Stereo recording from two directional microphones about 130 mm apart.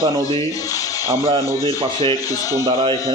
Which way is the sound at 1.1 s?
45° right (ahead or behind).